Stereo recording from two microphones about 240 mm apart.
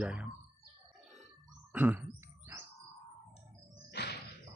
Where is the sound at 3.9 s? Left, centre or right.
Left.